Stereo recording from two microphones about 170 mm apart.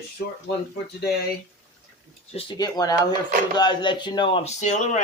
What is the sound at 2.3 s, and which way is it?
Speech, 25° left (ahead or behind).